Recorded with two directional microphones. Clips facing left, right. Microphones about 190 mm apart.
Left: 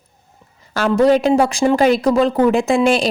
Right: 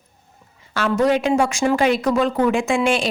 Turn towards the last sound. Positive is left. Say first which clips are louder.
# left 4 dB
turn(degrees=35)  # may be behind; listen again after turning